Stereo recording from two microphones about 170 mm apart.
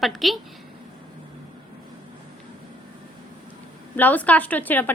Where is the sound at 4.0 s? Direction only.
10° left (ahead or behind).